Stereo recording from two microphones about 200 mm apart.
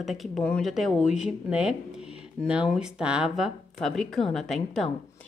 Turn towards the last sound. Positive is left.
turn(degrees=0)  # may be behind; listen again after turning